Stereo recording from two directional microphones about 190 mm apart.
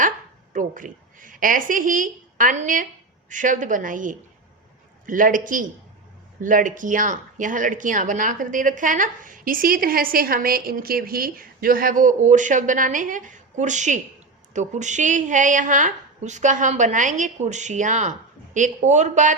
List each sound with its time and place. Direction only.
0.5 s a woman's voice: 45° right (ahead or behind)